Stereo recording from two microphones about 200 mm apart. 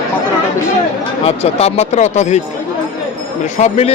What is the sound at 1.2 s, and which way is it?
A man's voice, 30° left (ahead or behind).